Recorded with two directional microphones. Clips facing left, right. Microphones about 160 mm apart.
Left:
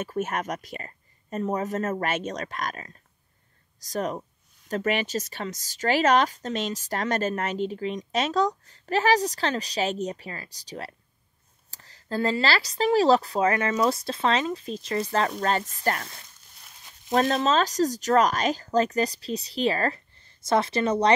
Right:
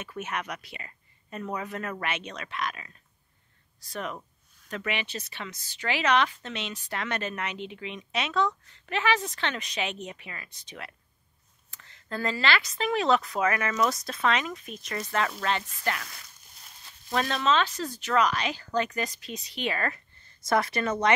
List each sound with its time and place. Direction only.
0.0 s speech: 45° left (ahead or behind)
17.1 s speech: 40° left (ahead or behind)